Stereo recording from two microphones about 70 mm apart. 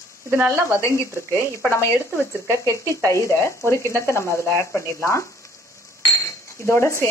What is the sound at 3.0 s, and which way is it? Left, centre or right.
Speech, left.